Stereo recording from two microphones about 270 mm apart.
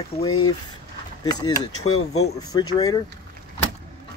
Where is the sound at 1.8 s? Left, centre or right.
Left.